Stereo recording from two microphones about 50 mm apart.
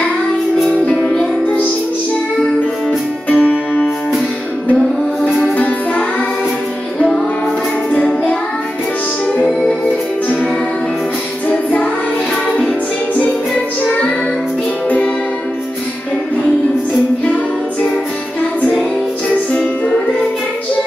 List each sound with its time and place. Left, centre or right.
0.8 s music: left
3.3 s music: left
11.4 s music: left